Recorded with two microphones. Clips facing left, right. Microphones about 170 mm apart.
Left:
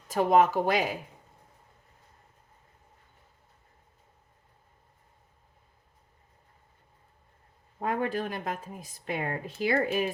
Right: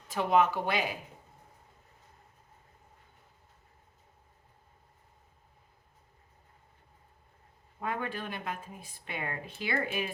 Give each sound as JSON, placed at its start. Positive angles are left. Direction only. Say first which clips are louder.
{"t": 0.1, "sound": "speech", "louder": "left 4 dB", "side_deg": 45}
{"t": 7.8, "sound": "speech", "louder": "left 6 dB", "side_deg": 40}